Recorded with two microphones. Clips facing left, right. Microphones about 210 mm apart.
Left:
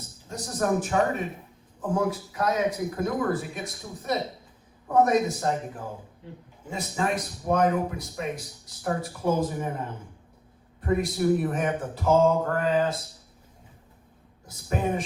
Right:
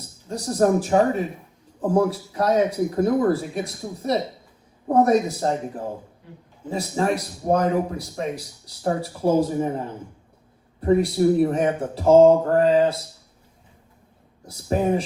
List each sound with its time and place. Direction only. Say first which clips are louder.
0.3 s speech: right 7 dB; 30° right (ahead or behind)
6.7 s speech: right 5 dB; 35° right (ahead or behind)
10.8 s a man's voice: right 7 dB; 30° right (ahead or behind)
14.4 s speech: right 6 dB; 30° right (ahead or behind)